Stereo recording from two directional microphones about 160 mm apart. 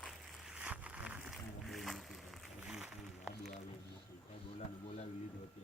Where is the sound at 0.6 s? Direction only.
10° right (ahead or behind).